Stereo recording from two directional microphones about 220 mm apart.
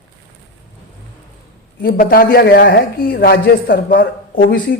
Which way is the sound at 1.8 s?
40° left (ahead or behind).